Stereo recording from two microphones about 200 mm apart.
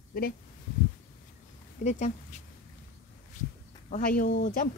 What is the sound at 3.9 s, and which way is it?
Speech, 45° left (ahead or behind).